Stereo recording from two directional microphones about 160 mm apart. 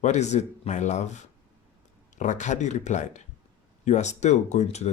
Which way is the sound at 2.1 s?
50° left (ahead or behind).